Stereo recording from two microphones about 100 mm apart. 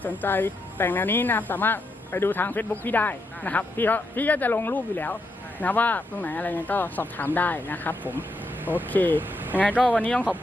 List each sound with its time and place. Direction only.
0.0 s a woman's voice: 20° left (ahead or behind)